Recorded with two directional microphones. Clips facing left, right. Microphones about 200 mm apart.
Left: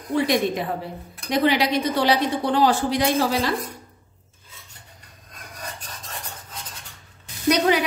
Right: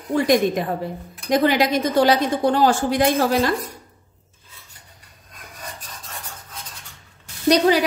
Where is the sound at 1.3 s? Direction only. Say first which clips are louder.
Right 2 dB; 45° right (ahead or behind).